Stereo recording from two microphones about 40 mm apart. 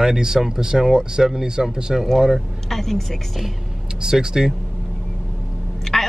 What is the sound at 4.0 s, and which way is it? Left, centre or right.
Speech, centre.